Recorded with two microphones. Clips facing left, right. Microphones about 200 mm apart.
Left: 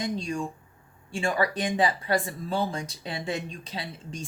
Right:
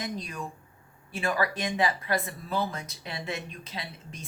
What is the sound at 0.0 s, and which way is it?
Speech, 25° left (ahead or behind).